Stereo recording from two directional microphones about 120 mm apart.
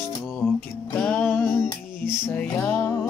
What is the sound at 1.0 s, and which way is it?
Music, 10° left (ahead or behind).